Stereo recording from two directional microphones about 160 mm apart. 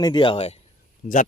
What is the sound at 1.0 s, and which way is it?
Speech, 65° left (ahead or behind).